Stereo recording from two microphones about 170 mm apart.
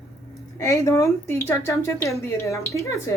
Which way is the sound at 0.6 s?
15° left (ahead or behind).